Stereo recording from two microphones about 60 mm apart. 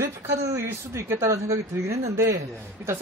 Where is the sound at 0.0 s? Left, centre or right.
Right.